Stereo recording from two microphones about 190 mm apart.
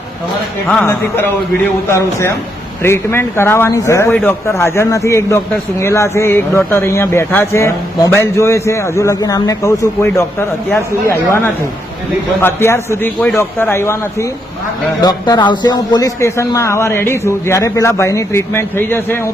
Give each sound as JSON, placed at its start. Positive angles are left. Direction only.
{"t": 0.7, "sound": "a man's voice", "side_deg": 5}
{"t": 2.8, "sound": "a man's voice", "side_deg": 15}